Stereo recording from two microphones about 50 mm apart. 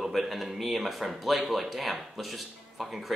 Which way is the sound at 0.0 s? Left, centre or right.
Centre.